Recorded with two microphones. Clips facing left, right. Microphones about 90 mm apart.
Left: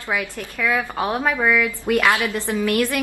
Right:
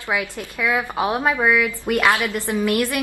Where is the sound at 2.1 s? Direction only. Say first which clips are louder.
Even; 20° left (ahead or behind).